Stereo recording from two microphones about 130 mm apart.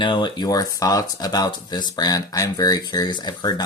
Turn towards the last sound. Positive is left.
turn(degrees=35)  # may be behind; listen again after turning